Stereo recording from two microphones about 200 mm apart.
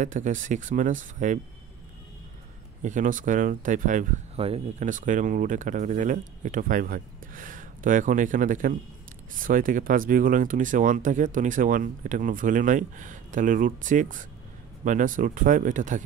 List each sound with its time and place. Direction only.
0.0 s speech: 40° right (ahead or behind)
2.8 s speech: 40° right (ahead or behind)